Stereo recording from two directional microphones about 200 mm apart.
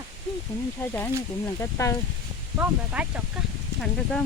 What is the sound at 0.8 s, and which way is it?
Speech, 10° left (ahead or behind).